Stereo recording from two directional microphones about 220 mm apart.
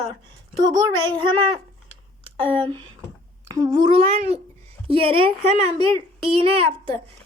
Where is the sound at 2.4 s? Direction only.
20° right (ahead or behind).